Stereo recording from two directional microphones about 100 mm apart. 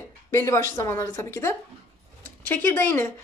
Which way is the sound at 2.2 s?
15° left (ahead or behind).